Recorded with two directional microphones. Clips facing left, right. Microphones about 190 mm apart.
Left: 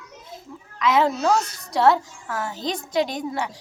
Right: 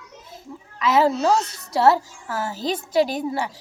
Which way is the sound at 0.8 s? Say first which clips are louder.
Right 1 dB; 5° right (ahead or behind).